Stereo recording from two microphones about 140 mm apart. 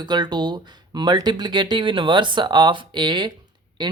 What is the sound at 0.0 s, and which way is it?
Speech, 30° right (ahead or behind).